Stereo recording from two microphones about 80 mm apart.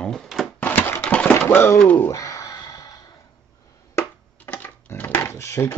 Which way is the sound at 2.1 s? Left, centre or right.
Left.